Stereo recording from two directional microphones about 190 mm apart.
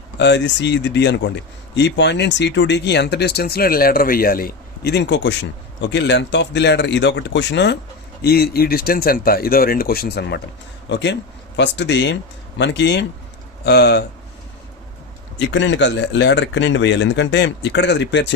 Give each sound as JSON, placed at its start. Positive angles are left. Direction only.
{"t": 0.2, "sound": "speech", "side_deg": 65}
{"t": 8.2, "sound": "speech", "side_deg": 55}
{"t": 15.4, "sound": "speech", "side_deg": 75}